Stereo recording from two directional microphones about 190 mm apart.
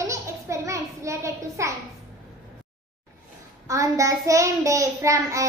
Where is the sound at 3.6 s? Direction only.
15° right (ahead or behind).